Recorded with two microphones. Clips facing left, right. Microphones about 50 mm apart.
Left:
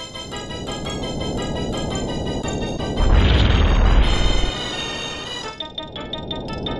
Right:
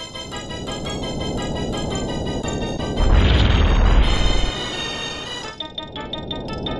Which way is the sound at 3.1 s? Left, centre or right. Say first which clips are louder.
Even; centre.